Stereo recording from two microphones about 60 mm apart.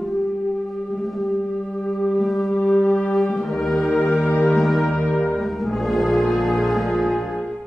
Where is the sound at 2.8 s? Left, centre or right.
Centre.